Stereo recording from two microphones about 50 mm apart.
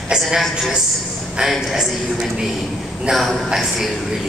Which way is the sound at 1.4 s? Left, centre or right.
Centre.